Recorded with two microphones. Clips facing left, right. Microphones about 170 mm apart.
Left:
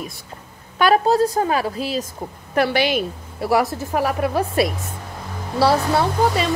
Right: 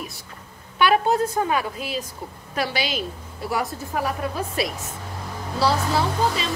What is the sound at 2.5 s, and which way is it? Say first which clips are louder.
A woman's voice: left 7 dB; 60° left (ahead or behind).